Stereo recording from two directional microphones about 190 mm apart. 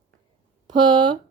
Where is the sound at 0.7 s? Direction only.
25° right (ahead or behind).